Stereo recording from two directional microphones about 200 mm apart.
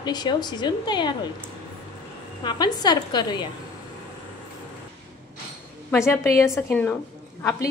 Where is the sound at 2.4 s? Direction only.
20° left (ahead or behind).